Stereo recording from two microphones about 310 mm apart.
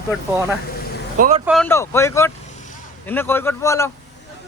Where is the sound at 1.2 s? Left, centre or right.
Right.